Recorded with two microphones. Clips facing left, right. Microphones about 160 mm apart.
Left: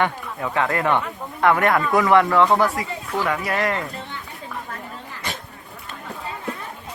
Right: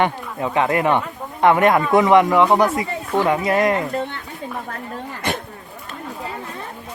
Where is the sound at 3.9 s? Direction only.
60° right (ahead or behind).